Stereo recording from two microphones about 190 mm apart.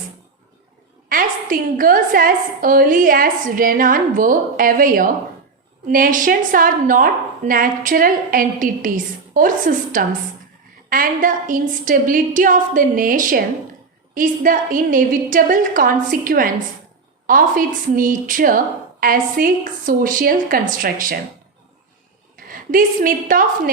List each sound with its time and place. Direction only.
1.1 s a woman's voice: 50° right (ahead or behind)
22.4 s a woman's voice: 45° right (ahead or behind)